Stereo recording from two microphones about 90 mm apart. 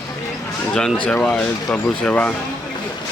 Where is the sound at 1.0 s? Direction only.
15° left (ahead or behind).